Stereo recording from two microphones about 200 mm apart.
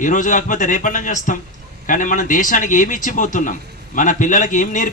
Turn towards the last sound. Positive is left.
turn(degrees=40)  # may be behind; listen again after turning